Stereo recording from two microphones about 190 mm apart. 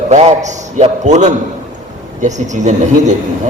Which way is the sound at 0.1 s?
35° right (ahead or behind).